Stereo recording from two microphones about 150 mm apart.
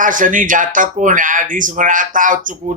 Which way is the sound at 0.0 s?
60° right (ahead or behind).